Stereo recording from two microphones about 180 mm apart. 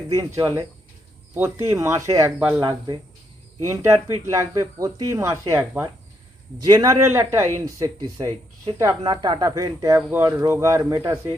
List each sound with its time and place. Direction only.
0.1 s speech: 20° right (ahead or behind)